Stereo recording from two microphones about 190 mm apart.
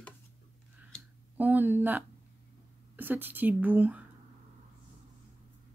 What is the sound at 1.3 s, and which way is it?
A woman's voice, 10° right (ahead or behind).